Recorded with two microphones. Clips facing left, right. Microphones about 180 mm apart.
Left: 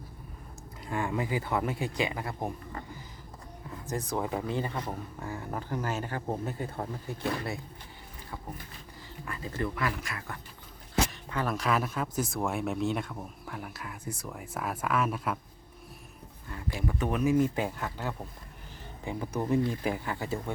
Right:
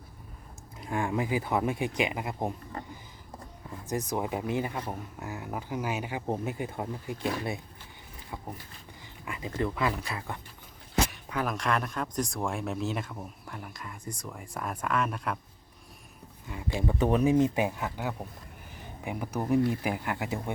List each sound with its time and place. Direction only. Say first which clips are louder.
0.8 s speech: right 2 dB; 15° right (ahead or behind)
3.8 s speech: right 1 dB; 20° right (ahead or behind)
9.2 s speech: right 1 dB; 15° right (ahead or behind)
10.0 s speech: right 3 dB; 30° right (ahead or behind)
11.1 s a sound: right 1 dB; 10° right (ahead or behind)
11.4 s speech: left 2 dB; centre (ahead or behind)
16.5 s speech: right 3 dB; 20° right (ahead or behind)
17.2 s speech: right 2 dB; 20° right (ahead or behind)